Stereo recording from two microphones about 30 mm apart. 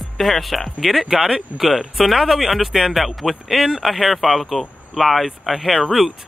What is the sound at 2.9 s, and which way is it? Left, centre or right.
Speech, centre.